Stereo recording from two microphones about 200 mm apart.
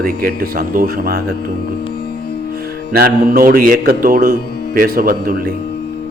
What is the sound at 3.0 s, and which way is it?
A man's voice, 45° right (ahead or behind).